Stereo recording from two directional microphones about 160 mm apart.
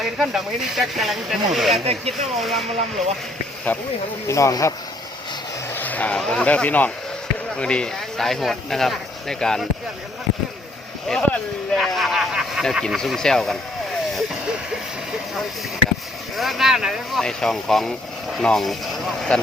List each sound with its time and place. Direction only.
0.0 s speech: centre (ahead or behind)
1.8 s speech: 40° right (ahead or behind)
2.4 s speech: centre (ahead or behind)
3.7 s speech: 10° left (ahead or behind)
5.7 s speech: 10° left (ahead or behind)
11.1 s speech: 5° left (ahead or behind)
14.1 s vehicle: centre (ahead or behind)
16.4 s speech: centre (ahead or behind)